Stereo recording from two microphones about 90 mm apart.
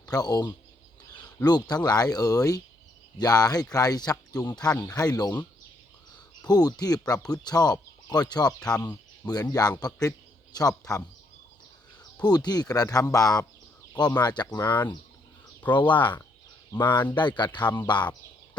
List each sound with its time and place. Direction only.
0.0 s speech: 45° left (ahead or behind)
6.4 s a man's voice: 45° left (ahead or behind)
12.2 s speech: 50° left (ahead or behind)
15.9 s speech: 60° left (ahead or behind)